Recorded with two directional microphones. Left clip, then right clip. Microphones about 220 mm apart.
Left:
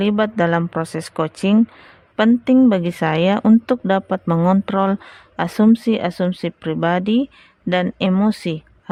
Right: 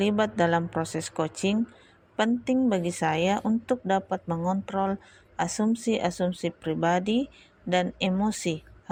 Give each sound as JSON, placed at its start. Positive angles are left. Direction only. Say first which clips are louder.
{"t": 0.0, "sound": "speech", "louder": "left 6 dB", "side_deg": 30}